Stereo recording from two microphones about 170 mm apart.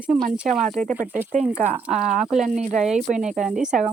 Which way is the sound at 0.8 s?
45° right (ahead or behind).